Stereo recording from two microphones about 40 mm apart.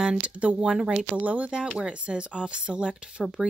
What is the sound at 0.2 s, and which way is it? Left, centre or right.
Speech, right.